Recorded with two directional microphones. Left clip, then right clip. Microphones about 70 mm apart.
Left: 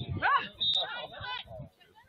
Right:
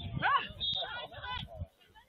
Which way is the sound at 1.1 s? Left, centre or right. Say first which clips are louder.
Left 2 dB; centre.